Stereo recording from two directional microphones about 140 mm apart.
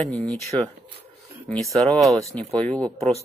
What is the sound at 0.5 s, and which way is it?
Speech, 30° right (ahead or behind).